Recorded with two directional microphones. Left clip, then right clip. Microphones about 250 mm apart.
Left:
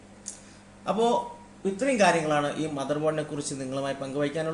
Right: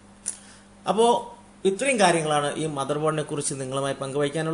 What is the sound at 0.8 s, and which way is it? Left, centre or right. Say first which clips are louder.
Speech: right 4 dB; right.